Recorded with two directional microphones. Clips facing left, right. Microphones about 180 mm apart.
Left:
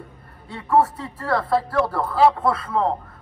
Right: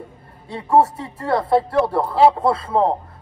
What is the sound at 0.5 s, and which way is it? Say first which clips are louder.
A man's voice: right 3 dB; 25° right (ahead or behind).